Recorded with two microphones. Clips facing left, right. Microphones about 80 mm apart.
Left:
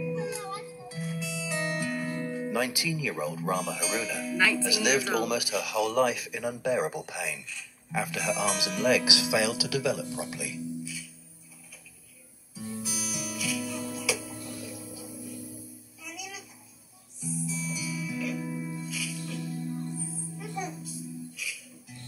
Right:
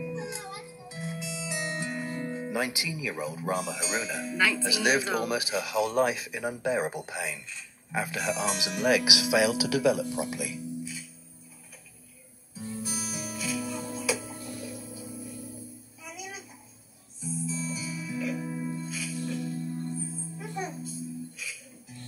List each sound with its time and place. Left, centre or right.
0.0 s music: right
2.2 s speech: right
12.8 s music: right
17.5 s music: right